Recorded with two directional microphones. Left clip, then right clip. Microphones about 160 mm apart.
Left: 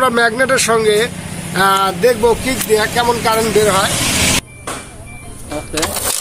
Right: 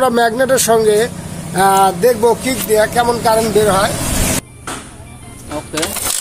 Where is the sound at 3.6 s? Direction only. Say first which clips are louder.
Even; 30° right (ahead or behind).